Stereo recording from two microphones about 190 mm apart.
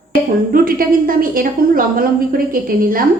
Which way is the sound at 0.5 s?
50° right (ahead or behind).